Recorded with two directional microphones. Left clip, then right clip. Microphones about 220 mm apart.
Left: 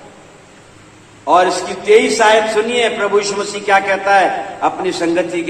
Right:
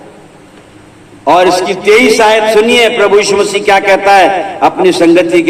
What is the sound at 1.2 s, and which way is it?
A man's voice, 50° right (ahead or behind).